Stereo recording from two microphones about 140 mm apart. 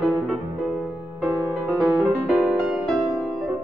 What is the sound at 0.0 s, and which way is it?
Music, 5° right (ahead or behind).